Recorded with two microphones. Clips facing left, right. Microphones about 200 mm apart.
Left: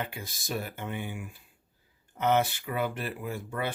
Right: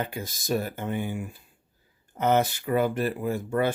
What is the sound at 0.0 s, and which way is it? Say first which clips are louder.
Speech: right 5 dB; 40° right (ahead or behind).